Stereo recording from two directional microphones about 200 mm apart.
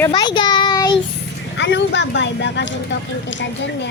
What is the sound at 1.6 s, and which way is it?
Speech, 60° left (ahead or behind).